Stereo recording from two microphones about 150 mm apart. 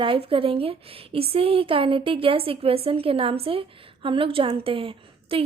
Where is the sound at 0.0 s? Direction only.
35° right (ahead or behind).